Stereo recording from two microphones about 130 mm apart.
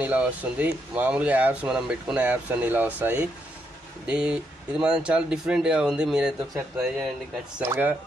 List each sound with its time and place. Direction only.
0.0 s speech: 10° right (ahead or behind)
7.5 s speech: 15° right (ahead or behind)